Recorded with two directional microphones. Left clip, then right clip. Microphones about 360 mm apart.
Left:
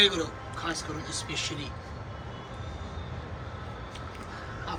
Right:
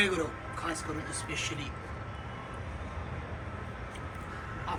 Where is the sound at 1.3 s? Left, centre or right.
Centre.